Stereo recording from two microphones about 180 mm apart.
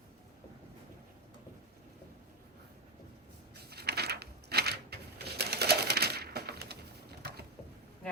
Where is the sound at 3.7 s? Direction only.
65° right (ahead or behind).